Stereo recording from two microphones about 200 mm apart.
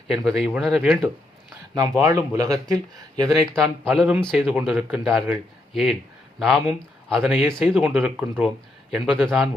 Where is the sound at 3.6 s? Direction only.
Centre (ahead or behind).